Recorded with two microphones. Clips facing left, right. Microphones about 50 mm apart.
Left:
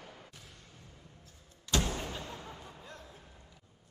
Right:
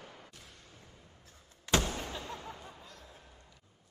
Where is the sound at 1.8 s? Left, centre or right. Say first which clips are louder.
Even; centre.